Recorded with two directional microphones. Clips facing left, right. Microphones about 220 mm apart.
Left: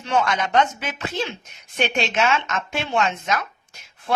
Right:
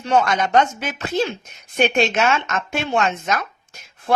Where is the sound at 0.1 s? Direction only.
40° right (ahead or behind).